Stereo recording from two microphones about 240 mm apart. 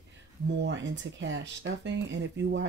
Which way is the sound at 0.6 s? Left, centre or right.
Right.